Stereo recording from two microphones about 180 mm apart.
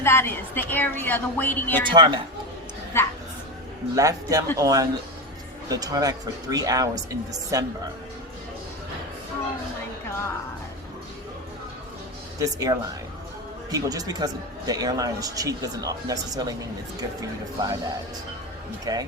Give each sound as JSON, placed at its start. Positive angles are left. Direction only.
{"t": 0.0, "sound": "a woman's voice", "side_deg": 15}
{"t": 1.9, "sound": "speech", "side_deg": -25}
{"t": 2.9, "sound": "dog", "side_deg": 15}
{"t": 3.9, "sound": "speech", "side_deg": -20}
{"t": 12.4, "sound": "speech", "side_deg": -20}
{"t": 18.9, "sound": "speech", "side_deg": -20}